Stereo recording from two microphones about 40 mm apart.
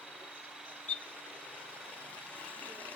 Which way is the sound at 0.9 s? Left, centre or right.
Left.